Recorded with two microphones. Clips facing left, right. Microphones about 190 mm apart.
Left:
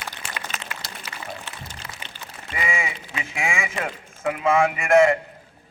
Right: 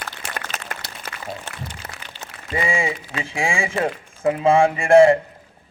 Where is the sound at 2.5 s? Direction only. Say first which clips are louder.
Right 6 dB; 30° right (ahead or behind).